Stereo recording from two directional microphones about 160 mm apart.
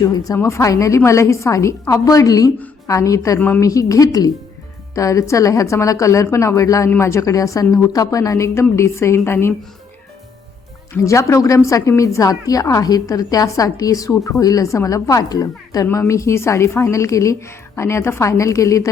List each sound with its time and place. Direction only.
0.0 s a woman's voice: 20° left (ahead or behind)
10.9 s a woman's voice: 20° left (ahead or behind)